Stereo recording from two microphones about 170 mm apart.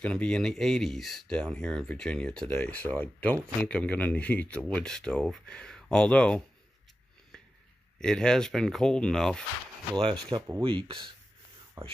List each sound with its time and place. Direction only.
0.0 s speech: 5° left (ahead or behind)
8.0 s speech: 5° left (ahead or behind)
10.3 s speech: 20° right (ahead or behind)
10.6 s speech: 30° right (ahead or behind)